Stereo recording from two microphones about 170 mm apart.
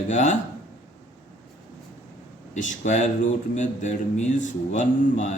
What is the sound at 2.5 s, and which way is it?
Speech, 45° left (ahead or behind).